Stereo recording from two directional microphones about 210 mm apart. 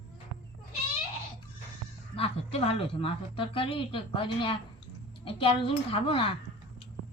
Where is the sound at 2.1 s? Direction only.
30° left (ahead or behind).